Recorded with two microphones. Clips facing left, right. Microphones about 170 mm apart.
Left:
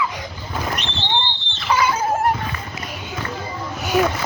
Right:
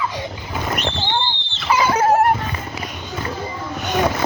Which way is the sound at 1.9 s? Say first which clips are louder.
Right 6 dB; 70° right (ahead or behind).